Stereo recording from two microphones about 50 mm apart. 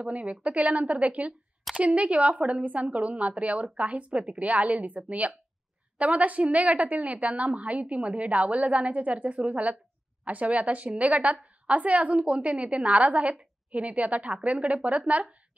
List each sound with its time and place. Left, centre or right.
0.0 s a woman's voice: right